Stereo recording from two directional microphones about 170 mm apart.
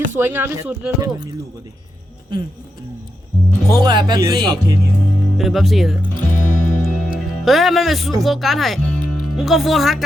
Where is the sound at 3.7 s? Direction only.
25° right (ahead or behind).